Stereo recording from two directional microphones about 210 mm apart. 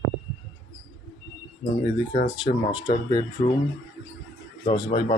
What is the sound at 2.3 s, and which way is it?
Speech, 25° left (ahead or behind).